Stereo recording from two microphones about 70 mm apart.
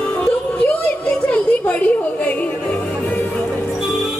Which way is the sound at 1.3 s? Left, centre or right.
Left.